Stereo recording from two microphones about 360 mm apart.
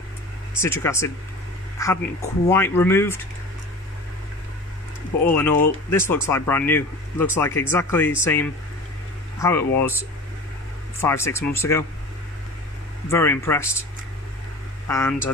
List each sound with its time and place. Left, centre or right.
0.6 s speech: centre
1.8 s a sound: centre
2.5 s speech: centre
5.2 s speech: centre
13.1 s speech: centre
14.9 s speech: centre